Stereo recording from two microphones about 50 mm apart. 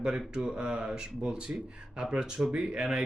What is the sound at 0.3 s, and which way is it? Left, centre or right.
A man's voice, centre.